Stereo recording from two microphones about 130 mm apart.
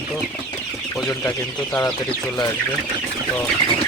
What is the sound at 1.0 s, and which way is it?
Speech, 25° left (ahead or behind).